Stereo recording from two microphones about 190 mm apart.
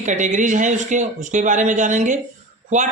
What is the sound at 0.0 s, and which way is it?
A man's voice, 40° right (ahead or behind).